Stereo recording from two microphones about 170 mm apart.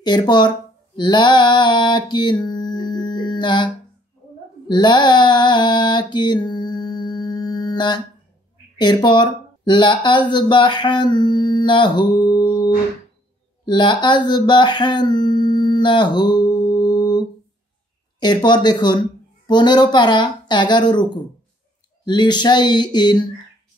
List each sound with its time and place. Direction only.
0.0 s speech: 25° left (ahead or behind)
0.9 s music: 25° left (ahead or behind)
4.6 s mantra: 25° left (ahead or behind)
8.7 s speech: 25° left (ahead or behind)
18.2 s speech: 25° left (ahead or behind)